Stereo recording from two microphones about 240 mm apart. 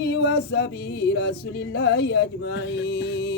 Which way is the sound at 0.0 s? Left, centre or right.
Left.